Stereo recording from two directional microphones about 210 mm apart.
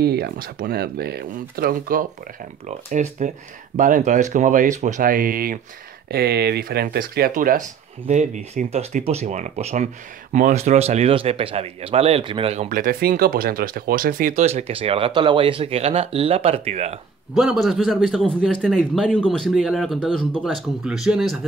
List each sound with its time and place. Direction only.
0.0 s speech: 50° right (ahead or behind); by 17.0 s 30° right (ahead or behind)
17.3 s a man's voice: centre (ahead or behind)